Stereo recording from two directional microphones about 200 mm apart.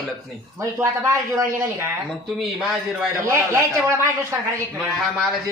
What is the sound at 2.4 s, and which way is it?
Speech, centre (ahead or behind).